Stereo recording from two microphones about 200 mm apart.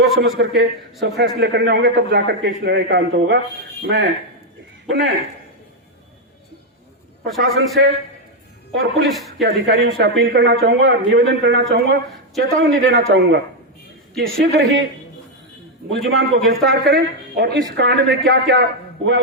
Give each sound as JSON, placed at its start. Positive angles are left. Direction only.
{"t": 0.2, "sound": "a woman's voice", "side_deg": -55}
{"t": 7.3, "sound": "a man's voice", "side_deg": 0}
{"t": 8.7, "sound": "a woman's voice", "side_deg": -55}
{"t": 15.9, "sound": "a man's voice", "side_deg": 0}
{"t": 16.5, "sound": "a woman's voice", "side_deg": -55}